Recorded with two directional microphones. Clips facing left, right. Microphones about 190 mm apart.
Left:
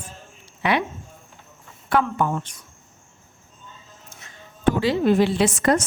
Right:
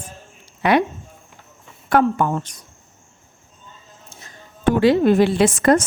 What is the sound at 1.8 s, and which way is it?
Speech, 45° right (ahead or behind).